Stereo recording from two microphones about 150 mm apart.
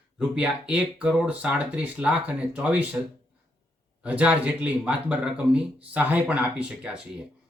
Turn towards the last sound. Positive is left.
turn(degrees=-5)  # may be behind; listen again after turning